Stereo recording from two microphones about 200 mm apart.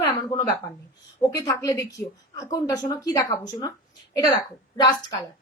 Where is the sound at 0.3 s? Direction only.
20° left (ahead or behind).